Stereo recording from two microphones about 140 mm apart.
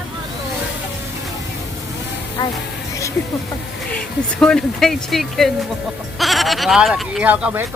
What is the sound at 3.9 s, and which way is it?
Speech, 5° left (ahead or behind).